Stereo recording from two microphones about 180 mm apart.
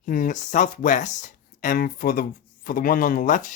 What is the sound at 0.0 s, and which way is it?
Speech, 45° left (ahead or behind).